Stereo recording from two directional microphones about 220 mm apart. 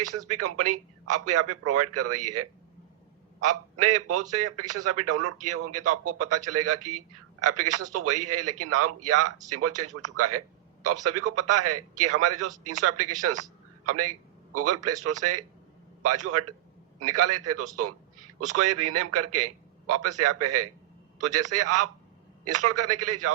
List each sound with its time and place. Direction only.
0.3 s a man's voice: 90° right